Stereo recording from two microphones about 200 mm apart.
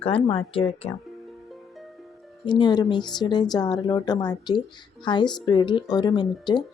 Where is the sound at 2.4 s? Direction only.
20° left (ahead or behind).